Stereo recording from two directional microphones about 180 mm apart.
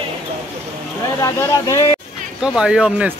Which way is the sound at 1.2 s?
20° left (ahead or behind).